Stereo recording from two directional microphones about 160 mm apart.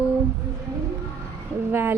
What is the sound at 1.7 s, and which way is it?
Speech, 15° right (ahead or behind).